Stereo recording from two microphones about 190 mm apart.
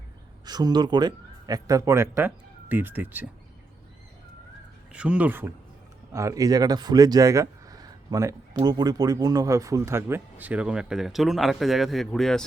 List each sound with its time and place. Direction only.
0.4 s speech: 20° right (ahead or behind)
4.9 s speech: 5° right (ahead or behind)